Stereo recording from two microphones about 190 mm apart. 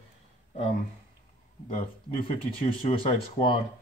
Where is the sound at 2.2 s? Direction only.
40° left (ahead or behind).